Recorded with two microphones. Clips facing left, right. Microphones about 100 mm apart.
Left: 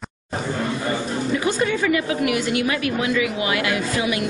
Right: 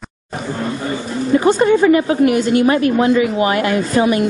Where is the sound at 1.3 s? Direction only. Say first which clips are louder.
Right 11 dB; 40° right (ahead or behind).